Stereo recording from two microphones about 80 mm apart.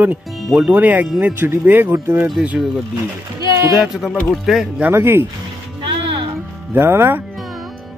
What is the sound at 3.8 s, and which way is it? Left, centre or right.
Speech, centre.